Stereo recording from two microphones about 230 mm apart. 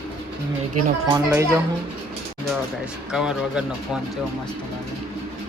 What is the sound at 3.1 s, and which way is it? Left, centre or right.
Speech, centre.